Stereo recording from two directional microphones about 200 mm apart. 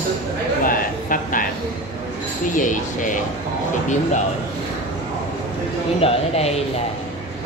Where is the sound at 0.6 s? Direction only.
45° left (ahead or behind).